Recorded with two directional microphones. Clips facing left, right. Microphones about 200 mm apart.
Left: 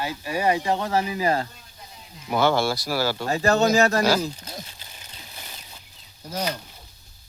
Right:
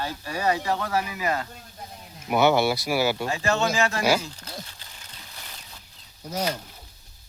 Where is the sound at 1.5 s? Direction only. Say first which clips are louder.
Right 5 dB; 50° right (ahead or behind).